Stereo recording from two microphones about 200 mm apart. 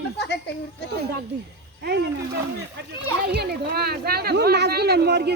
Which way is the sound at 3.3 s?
55° right (ahead or behind).